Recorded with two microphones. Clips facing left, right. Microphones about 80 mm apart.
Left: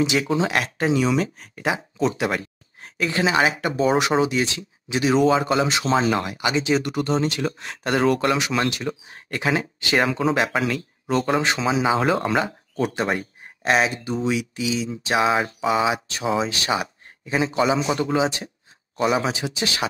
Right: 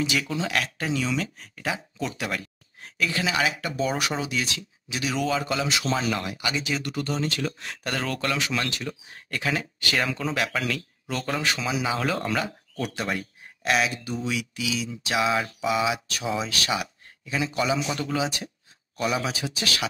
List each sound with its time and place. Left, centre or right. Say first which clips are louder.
0.0 s speech: left 6 dB; left